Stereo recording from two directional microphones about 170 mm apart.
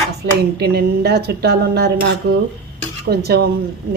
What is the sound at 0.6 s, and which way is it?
Speech, 70° right (ahead or behind).